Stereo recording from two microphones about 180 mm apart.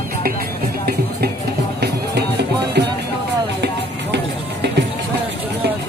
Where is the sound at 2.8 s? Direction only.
65° right (ahead or behind).